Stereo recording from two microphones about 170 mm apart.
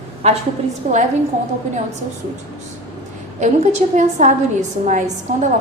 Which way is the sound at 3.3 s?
45° right (ahead or behind).